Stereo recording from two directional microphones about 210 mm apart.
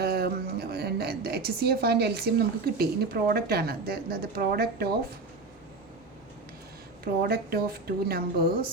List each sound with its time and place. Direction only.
0.0 s speech: 45° right (ahead or behind)
7.0 s a woman's voice: 45° right (ahead or behind)